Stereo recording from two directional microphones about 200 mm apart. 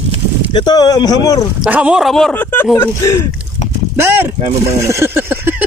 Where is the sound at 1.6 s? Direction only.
5° right (ahead or behind); by 3.3 s 15° left (ahead or behind).